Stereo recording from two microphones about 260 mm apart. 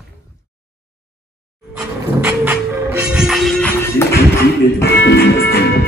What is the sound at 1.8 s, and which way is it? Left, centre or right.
Music, centre.